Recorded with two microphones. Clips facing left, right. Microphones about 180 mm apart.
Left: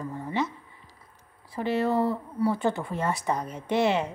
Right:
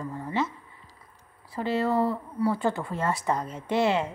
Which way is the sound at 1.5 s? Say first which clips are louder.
Even; 20° left (ahead or behind).